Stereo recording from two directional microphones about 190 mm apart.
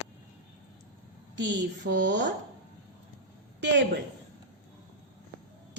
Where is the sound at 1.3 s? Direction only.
70° right (ahead or behind).